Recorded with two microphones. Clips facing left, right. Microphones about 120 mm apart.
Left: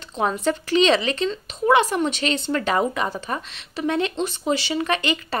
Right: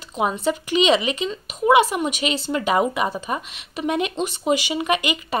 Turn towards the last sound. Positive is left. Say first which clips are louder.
# right 1 dB
turn(degrees=-15)  # may be behind; listen again after turning